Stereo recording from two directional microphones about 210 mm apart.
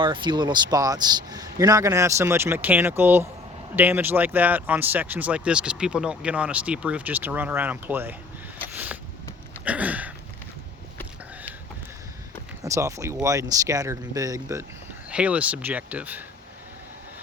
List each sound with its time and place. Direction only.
0.0 s speech: 20° right (ahead or behind)
8.7 s a sound: 10° right (ahead or behind)
12.6 s speech: 15° right (ahead or behind)